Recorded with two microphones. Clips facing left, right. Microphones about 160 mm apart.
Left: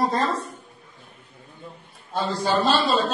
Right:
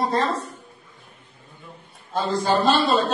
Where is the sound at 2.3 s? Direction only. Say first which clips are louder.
Right 2 dB; 50° right (ahead or behind).